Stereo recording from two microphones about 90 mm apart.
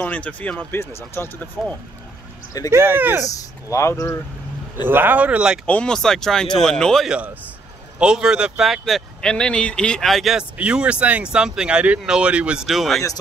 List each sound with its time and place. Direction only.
0.0 s speech: 15° left (ahead or behind)
0.7 s speech: 30° left (ahead or behind)
2.5 s speech: 40° left (ahead or behind)
3.0 s speech: 20° right (ahead or behind)
3.3 s speech: 40° left (ahead or behind)
4.8 s speech: 20° right (ahead or behind)
5.7 s speech: 10° left (ahead or behind)
8.0 s speech: 10° right (ahead or behind)
10.6 s speech: 10° right (ahead or behind)
12.6 s speech: centre (ahead or behind)